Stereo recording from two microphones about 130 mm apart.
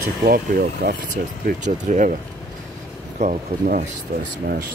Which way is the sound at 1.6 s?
70° right (ahead or behind).